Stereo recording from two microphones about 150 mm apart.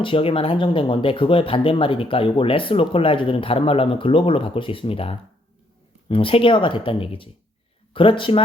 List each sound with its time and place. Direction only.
0.0 s speech: 35° left (ahead or behind)